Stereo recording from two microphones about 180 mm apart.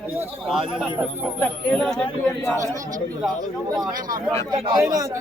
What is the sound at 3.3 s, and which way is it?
Speech, 20° right (ahead or behind).